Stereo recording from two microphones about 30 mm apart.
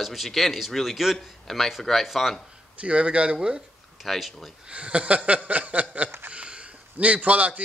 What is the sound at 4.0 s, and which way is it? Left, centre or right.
Speech, centre.